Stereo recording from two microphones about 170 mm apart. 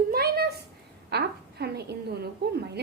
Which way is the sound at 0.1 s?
65° right (ahead or behind).